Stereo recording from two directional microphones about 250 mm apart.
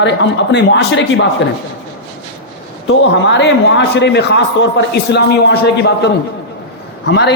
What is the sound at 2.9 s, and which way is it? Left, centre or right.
A man's voice, left.